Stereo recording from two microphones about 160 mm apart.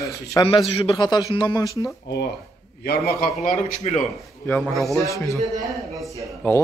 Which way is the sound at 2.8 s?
75° left (ahead or behind).